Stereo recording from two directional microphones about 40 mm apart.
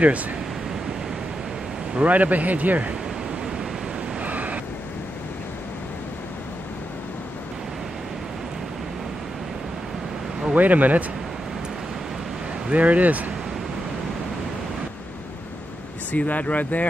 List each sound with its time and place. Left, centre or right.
0.0 s speech: right
2.0 s speech: right
3.3 s pink noise: centre
4.2 s vehicle: right
10.5 s speech: right
12.7 s speech: right
16.1 s speech: left